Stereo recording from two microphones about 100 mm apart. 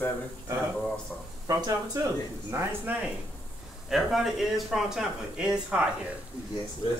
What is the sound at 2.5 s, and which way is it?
Speech, 25° right (ahead or behind).